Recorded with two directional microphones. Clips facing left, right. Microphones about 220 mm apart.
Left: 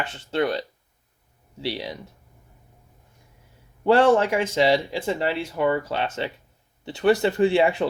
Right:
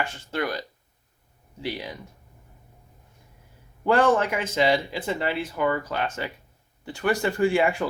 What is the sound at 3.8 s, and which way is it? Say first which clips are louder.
Speech: left 3 dB; 25° left (ahead or behind).